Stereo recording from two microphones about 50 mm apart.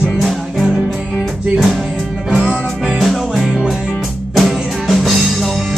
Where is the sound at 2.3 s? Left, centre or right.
Centre.